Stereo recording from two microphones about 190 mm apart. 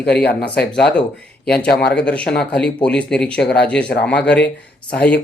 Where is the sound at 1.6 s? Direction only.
60° left (ahead or behind).